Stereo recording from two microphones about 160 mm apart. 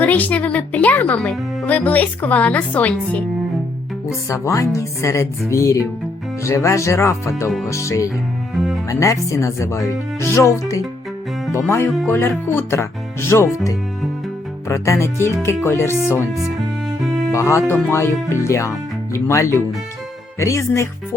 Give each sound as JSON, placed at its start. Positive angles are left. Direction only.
{"t": 0.0, "sound": "speech", "side_deg": 10}
{"t": 4.3, "sound": "speech", "side_deg": 20}
{"t": 12.0, "sound": "speech", "side_deg": 15}
{"t": 14.7, "sound": "speech", "side_deg": 20}
{"t": 17.3, "sound": "speech", "side_deg": 20}